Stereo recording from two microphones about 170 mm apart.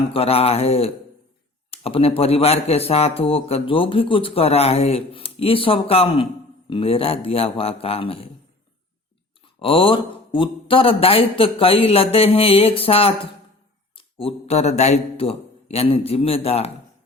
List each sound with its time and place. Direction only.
0.1 s a man's voice: 35° left (ahead or behind)
9.6 s a man's voice: 30° left (ahead or behind)